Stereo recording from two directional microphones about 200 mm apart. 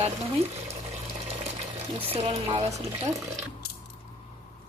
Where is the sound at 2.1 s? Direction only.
35° right (ahead or behind).